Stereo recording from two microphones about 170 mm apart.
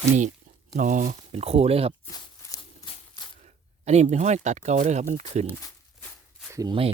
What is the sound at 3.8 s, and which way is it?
Speech, 40° right (ahead or behind).